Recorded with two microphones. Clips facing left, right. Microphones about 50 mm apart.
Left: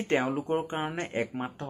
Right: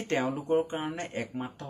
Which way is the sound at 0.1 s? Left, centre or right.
Left.